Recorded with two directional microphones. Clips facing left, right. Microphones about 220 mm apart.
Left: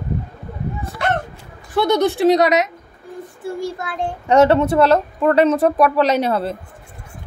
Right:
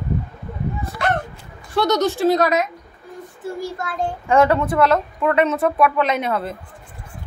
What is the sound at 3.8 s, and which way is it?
A woman's voice, 20° left (ahead or behind).